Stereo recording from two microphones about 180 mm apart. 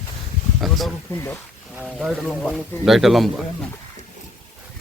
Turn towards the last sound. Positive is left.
turn(degrees=0)  # may be behind; listen again after turning